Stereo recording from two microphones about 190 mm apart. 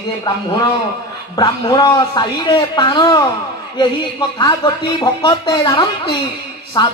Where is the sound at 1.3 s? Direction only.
20° left (ahead or behind).